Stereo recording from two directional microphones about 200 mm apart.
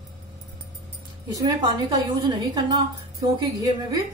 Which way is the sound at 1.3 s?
20° right (ahead or behind).